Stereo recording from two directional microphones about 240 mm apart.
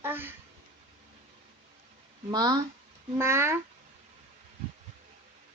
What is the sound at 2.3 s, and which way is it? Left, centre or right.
Speech, centre.